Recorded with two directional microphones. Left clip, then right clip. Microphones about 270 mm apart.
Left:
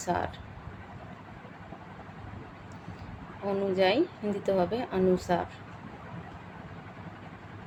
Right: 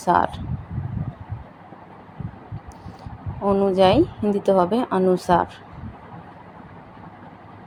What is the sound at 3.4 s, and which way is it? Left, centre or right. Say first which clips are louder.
A woman's voice: right 9 dB; right.